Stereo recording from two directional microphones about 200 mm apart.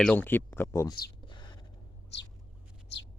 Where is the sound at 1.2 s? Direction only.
20° left (ahead or behind).